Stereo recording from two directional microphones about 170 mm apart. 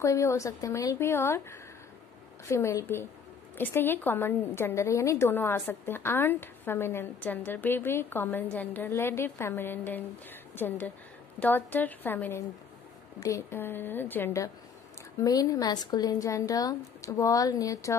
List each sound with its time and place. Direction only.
0.0 s a woman's voice: 15° left (ahead or behind)